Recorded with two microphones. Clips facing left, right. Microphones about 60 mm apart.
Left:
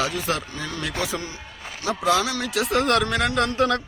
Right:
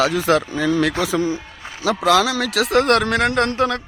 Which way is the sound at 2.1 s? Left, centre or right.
Right.